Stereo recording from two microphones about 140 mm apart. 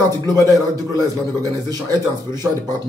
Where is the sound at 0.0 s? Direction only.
30° right (ahead or behind).